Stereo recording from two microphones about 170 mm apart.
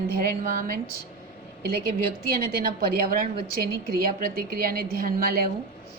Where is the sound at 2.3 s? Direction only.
65° right (ahead or behind).